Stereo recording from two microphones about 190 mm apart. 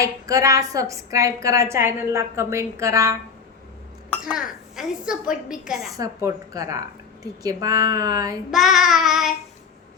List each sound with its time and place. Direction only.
0.3 s a woman's voice: 15° right (ahead or behind)
4.1 s a sound: centre (ahead or behind)
4.7 s a woman's voice: centre (ahead or behind)
5.5 s child singing: centre (ahead or behind)
6.0 s a woman's voice: 20° right (ahead or behind)
8.4 s child singing: centre (ahead or behind)